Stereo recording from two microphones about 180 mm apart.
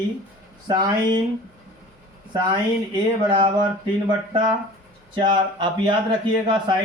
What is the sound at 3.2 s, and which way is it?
Speech, 25° right (ahead or behind).